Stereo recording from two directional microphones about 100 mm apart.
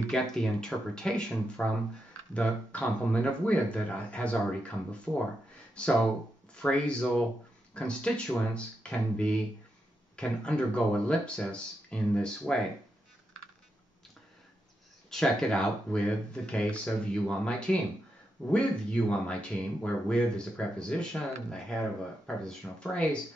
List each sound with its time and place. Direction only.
0.1 s speech: 5° left (ahead or behind)
15.0 s speech: 5° left (ahead or behind)